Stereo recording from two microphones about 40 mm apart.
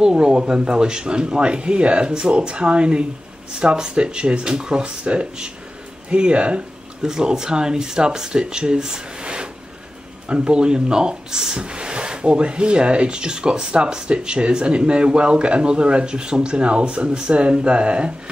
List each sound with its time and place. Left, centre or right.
0.0 s speech: centre
7.0 s speech: centre